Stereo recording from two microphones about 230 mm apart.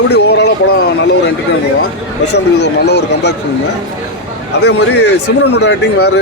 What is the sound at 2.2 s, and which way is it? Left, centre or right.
Speech, left.